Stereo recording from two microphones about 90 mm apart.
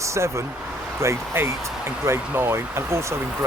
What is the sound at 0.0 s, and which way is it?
Speech, 35° right (ahead or behind).